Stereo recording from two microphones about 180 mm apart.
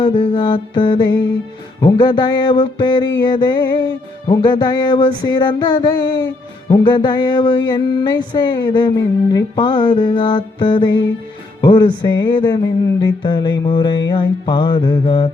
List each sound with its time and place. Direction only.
0.0 s music: 25° left (ahead or behind)
11.6 s speech: 25° left (ahead or behind)
12.0 s music: 25° left (ahead or behind)